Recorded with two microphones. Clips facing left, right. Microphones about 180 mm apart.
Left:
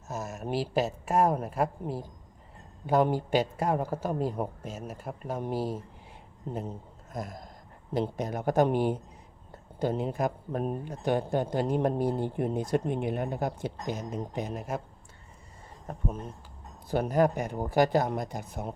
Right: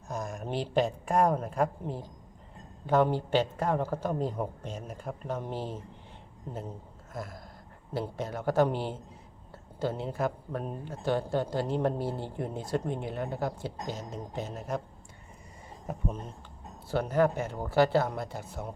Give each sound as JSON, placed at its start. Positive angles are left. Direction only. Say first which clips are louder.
{"t": 0.1, "sound": "speech", "louder": "left 1 dB", "side_deg": 5}
{"t": 15.9, "sound": "speech", "louder": "right 2 dB", "side_deg": -5}
{"t": 16.9, "sound": "speech", "louder": "left 1 dB", "side_deg": 15}